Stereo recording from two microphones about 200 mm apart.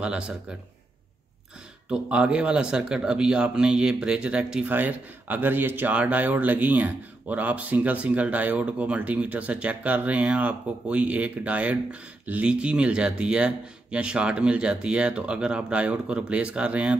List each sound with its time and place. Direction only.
0.0 s speech: 5° right (ahead or behind)
1.9 s speech: 5° right (ahead or behind)